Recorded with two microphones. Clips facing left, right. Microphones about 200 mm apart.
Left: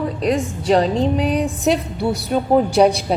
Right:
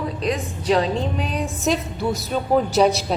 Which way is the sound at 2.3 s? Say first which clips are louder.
Left 4 dB; 10° left (ahead or behind).